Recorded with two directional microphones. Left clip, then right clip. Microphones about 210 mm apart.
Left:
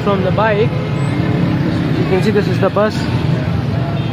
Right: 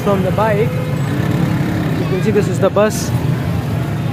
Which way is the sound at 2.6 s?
5° left (ahead or behind).